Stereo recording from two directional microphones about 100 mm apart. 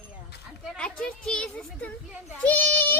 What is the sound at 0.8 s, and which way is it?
A woman's voice, 10° left (ahead or behind).